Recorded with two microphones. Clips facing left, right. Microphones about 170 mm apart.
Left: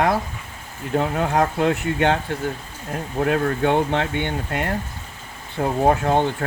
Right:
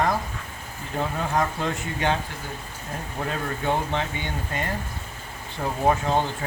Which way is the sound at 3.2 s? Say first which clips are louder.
Left 9 dB; 65° left (ahead or behind).